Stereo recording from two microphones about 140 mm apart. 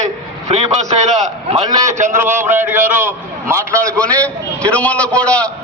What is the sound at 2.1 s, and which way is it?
A man's voice, 15° right (ahead or behind).